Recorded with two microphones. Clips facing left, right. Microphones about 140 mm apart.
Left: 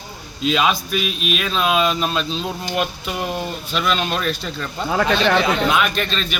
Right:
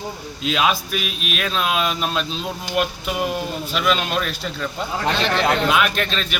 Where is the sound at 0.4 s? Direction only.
Centre (ahead or behind).